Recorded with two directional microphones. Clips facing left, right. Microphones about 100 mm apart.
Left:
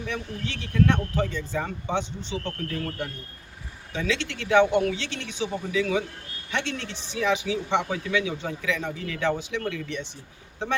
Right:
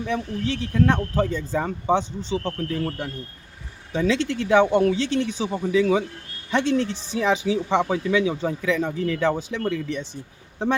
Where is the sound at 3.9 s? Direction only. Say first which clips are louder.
Right 6 dB; 35° right (ahead or behind).